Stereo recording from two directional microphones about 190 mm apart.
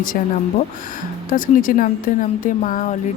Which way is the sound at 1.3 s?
45° left (ahead or behind).